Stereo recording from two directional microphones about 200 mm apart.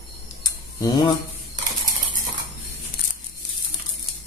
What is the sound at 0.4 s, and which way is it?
Tick, 20° left (ahead or behind).